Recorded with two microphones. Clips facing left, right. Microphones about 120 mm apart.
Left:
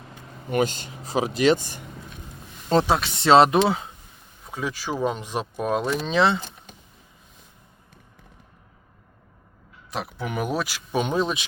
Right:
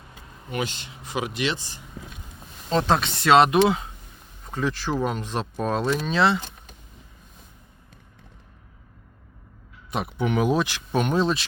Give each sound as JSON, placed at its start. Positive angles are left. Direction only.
{"t": 0.5, "sound": "speech", "side_deg": 45}
{"t": 2.8, "sound": "speech", "side_deg": 5}
{"t": 3.2, "sound": "speech", "side_deg": 30}
{"t": 4.4, "sound": "speech", "side_deg": 10}
{"t": 9.9, "sound": "speech", "side_deg": 0}